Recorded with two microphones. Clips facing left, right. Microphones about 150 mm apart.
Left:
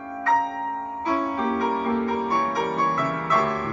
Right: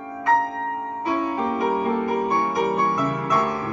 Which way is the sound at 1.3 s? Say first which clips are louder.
Right 1 dB; 10° right (ahead or behind).